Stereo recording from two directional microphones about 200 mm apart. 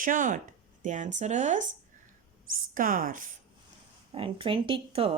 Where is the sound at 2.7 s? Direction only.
45° right (ahead or behind).